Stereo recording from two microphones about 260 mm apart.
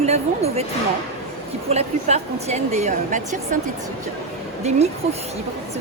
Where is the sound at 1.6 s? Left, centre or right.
Right.